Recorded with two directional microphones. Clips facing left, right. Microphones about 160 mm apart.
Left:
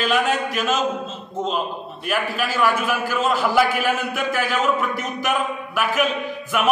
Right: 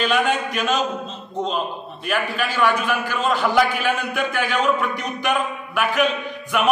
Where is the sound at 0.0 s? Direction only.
Centre (ahead or behind).